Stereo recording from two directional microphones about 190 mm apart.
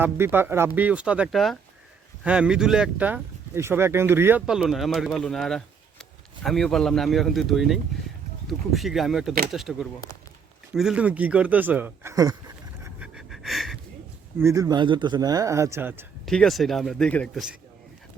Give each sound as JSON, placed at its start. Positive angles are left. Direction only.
{"t": 0.0, "sound": "a man's voice", "side_deg": -10}
{"t": 13.0, "sound": "a sound", "side_deg": 0}
{"t": 14.3, "sound": "a man's voice", "side_deg": -15}
{"t": 16.2, "sound": "speech", "side_deg": 0}